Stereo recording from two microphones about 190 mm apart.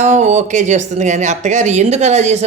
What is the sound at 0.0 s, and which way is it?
Speech, 40° right (ahead or behind).